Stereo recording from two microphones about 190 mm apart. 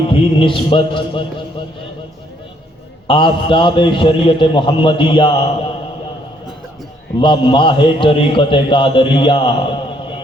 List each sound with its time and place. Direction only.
0.0 s a man's voice: 25° left (ahead or behind)
3.1 s a man's voice: 25° left (ahead or behind)
7.2 s a man's voice: 25° left (ahead or behind)